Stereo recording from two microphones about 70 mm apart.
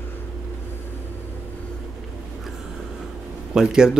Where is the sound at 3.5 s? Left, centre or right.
Centre.